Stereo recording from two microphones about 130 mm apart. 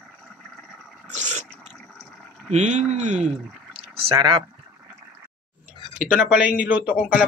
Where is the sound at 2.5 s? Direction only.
65° right (ahead or behind).